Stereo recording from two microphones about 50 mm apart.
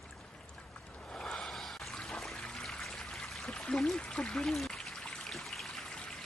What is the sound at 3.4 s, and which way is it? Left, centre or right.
Speech, centre.